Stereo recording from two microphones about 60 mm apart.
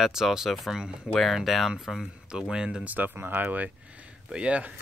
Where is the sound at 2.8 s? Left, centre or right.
Right.